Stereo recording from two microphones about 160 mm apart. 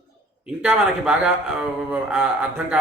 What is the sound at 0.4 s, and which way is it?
Speech, 5° right (ahead or behind).